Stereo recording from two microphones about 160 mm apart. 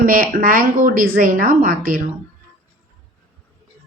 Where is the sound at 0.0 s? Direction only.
60° right (ahead or behind).